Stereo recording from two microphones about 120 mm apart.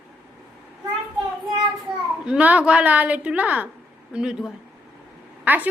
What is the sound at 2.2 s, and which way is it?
A woman's voice, 10° right (ahead or behind).